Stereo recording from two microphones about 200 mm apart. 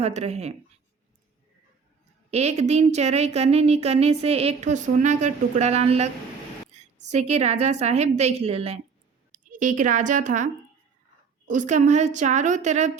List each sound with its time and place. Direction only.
0.0 s a woman's voice: 30° right (ahead or behind)
2.3 s a woman's voice: 35° right (ahead or behind)
7.1 s a woman's voice: 35° right (ahead or behind)
9.3 s a woman's voice: 40° right (ahead or behind)